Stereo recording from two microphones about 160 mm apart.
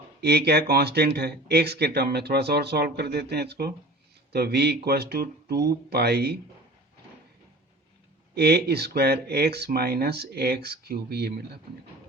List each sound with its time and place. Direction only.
0.2 s speech: 90° right
8.4 s speech: 90° right